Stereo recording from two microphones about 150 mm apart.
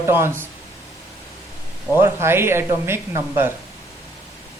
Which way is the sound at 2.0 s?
15° right (ahead or behind).